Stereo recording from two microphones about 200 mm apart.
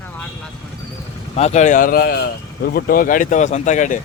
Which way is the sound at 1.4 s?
35° left (ahead or behind).